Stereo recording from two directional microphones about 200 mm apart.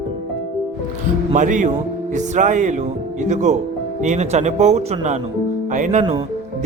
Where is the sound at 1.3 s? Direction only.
40° right (ahead or behind).